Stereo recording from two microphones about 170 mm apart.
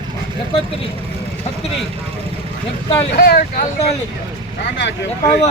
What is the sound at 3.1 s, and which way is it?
Speech, 65° left (ahead or behind).